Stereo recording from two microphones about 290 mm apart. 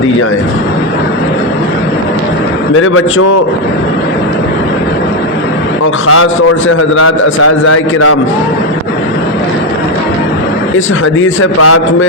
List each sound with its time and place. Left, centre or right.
2.8 s speech: left
5.8 s speech: left
10.8 s speech: left